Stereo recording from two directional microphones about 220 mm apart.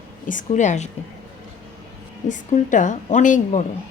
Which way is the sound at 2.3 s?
35° left (ahead or behind).